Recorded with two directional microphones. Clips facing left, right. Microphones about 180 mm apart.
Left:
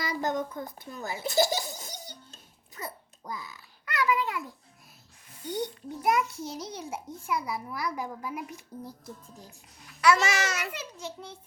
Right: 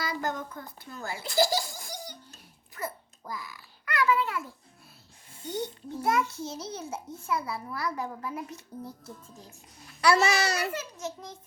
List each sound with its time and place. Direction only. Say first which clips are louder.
0.0 s a child's voice: left 3 dB; 20° left (ahead or behind)
2.7 s babbling: right 4 dB; 20° left (ahead or behind)
5.5 s a child's voice: left 1 dB; 15° left (ahead or behind)
9.8 s a child's voice: even; 35° right (ahead or behind)